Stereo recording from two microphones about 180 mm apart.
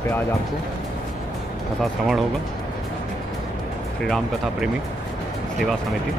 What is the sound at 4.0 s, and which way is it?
Speech, centre (ahead or behind).